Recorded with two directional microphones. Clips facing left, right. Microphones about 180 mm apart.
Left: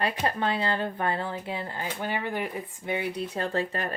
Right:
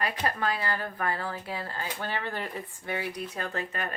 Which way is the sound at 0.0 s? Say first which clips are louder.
Left 2 dB; 25° left (ahead or behind).